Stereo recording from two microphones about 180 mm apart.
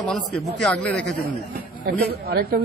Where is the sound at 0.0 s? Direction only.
Centre (ahead or behind).